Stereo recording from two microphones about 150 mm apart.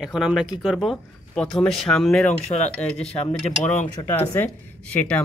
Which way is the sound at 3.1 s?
45° left (ahead or behind).